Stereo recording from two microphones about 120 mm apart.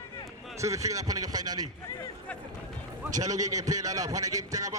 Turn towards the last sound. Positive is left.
turn(degrees=-30)  # may be behind; listen again after turning